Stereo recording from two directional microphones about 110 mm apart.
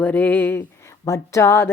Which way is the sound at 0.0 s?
15° left (ahead or behind).